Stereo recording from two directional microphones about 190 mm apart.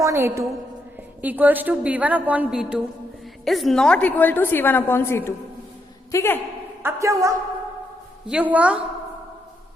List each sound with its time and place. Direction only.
0.0 s a woman's voice: 15° right (ahead or behind); by 6.4 s 15° left (ahead or behind)
6.8 s a woman's voice: 15° right (ahead or behind)